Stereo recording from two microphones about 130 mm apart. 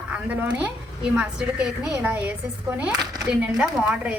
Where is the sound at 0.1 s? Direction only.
10° right (ahead or behind).